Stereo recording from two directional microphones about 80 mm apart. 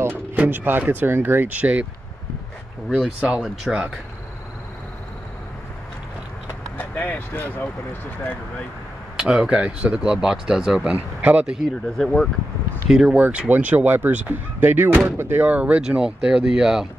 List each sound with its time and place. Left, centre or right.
0.4 s speech: right
3.0 s speech: centre
6.8 s speech: left
9.2 s speech: centre
11.1 s speech: centre
11.5 s speech: centre; by 15.4 s right
15.4 s speech: centre